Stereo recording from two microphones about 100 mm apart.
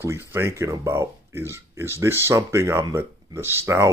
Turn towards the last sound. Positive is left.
turn(degrees=-25)  # may be behind; listen again after turning